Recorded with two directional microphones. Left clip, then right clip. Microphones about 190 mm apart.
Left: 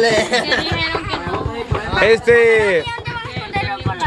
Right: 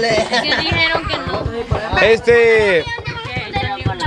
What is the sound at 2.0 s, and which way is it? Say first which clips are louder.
Speech: even; centre (ahead or behind).